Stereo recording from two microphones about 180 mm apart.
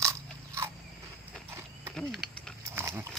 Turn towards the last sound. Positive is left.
turn(degrees=-15)  # may be behind; listen again after turning